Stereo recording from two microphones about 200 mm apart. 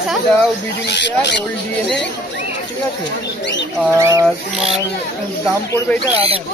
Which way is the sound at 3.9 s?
15° right (ahead or behind).